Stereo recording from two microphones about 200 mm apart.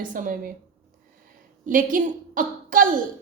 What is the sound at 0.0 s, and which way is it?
Speech, 40° right (ahead or behind).